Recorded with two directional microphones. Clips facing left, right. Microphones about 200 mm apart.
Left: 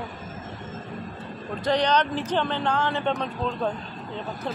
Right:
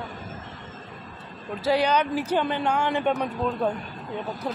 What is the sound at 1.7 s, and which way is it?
Speech, 10° right (ahead or behind).